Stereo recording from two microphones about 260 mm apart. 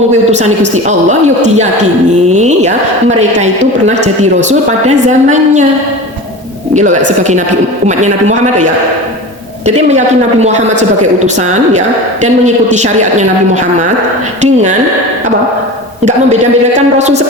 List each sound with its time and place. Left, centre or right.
0.3 s a woman's voice: right
2.3 s a woman's voice: right
6.7 s a woman's voice: right
10.4 s a woman's voice: right
16.0 s a woman's voice: right